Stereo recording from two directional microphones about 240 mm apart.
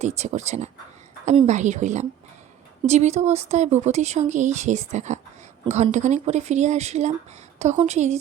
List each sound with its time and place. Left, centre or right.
0.0 s speech: right